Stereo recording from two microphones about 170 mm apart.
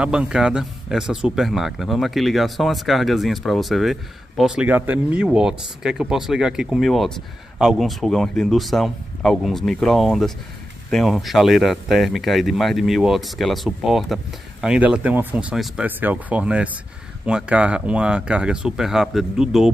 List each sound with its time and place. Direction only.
0.0 s speech: 5° right (ahead or behind)